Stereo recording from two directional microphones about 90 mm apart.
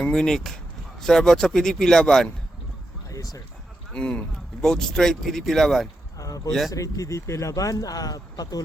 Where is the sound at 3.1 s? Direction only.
45° left (ahead or behind).